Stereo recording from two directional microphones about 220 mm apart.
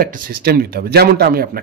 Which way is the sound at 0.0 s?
40° right (ahead or behind).